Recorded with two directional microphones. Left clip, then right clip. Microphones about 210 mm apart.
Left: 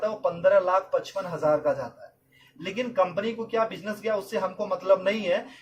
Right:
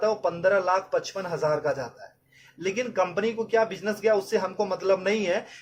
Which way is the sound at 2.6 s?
50° right (ahead or behind).